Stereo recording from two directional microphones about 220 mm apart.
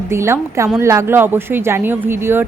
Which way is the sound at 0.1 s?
10° right (ahead or behind).